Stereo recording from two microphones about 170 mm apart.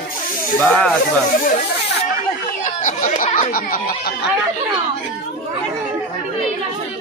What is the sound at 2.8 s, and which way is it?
Speech, 50° left (ahead or behind).